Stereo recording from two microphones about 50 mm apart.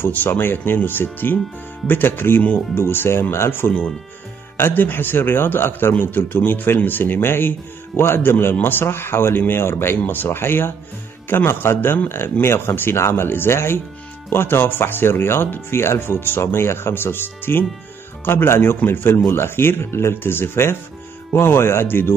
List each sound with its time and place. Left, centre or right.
0.0 s a man's voice: left
2.8 s a man's voice: left
15.4 s speech: left
15.8 s a man's voice: left
19.1 s a man's voice: left